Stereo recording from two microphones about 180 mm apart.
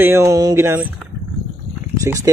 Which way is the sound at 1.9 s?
15° right (ahead or behind).